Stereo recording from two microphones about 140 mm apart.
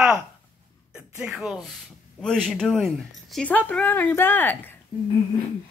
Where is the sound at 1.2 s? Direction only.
5° right (ahead or behind); by 4.7 s 15° left (ahead or behind).